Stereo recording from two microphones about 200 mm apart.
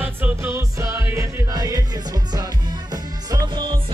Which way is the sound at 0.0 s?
10° right (ahead or behind).